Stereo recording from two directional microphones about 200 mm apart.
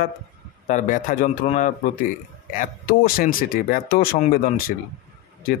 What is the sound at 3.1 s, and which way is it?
Speech, 45° left (ahead or behind).